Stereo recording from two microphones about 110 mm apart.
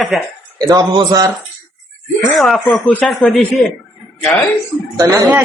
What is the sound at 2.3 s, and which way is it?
Speech, centre (ahead or behind).